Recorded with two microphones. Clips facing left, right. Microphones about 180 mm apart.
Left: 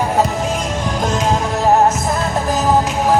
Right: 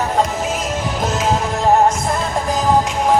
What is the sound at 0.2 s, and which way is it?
Music, 5° right (ahead or behind).